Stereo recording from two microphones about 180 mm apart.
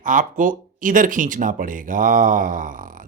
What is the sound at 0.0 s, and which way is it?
Speech, 45° right (ahead or behind).